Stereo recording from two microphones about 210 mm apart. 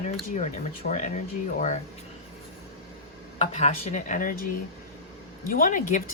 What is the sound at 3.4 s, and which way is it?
Speech, 30° left (ahead or behind).